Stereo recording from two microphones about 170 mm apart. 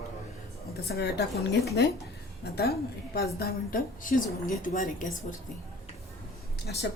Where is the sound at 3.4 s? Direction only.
60° left (ahead or behind).